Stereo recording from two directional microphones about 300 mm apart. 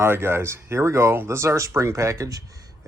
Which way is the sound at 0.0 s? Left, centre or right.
Centre.